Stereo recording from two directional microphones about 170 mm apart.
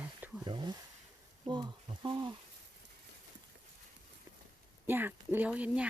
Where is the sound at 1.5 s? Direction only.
25° right (ahead or behind).